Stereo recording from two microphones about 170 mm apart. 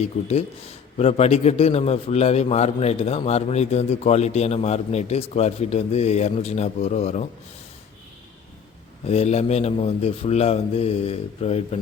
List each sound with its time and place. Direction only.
0.0 s a man's voice: 40° left (ahead or behind)
9.0 s a man's voice: 40° left (ahead or behind)